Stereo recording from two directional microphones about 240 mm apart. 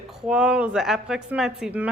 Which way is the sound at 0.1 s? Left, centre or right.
Centre.